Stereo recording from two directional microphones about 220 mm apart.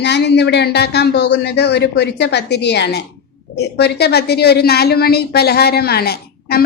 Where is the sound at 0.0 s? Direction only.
50° left (ahead or behind).